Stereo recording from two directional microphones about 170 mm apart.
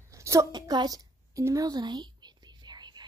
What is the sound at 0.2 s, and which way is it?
A woman's voice, 15° right (ahead or behind).